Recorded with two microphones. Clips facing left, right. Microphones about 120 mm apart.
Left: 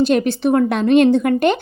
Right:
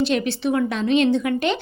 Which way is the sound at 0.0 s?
45° left (ahead or behind).